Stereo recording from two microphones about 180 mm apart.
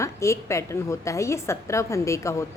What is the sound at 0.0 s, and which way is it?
A woman's voice, 15° left (ahead or behind).